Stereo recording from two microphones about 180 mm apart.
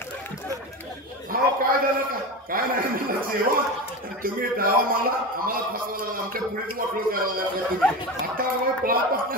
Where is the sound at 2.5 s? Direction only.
50° right (ahead or behind).